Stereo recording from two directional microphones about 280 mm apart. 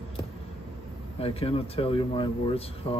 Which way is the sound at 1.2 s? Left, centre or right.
Left.